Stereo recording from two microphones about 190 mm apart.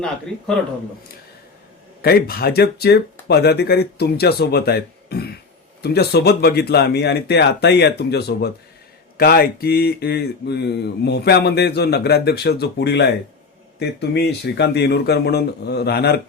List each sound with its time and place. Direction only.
2.0 s speech: 55° left (ahead or behind)